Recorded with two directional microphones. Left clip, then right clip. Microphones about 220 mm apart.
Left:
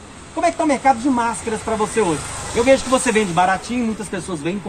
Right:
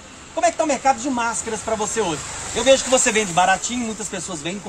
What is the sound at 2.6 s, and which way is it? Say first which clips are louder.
A man's voice: even; 20° right (ahead or behind).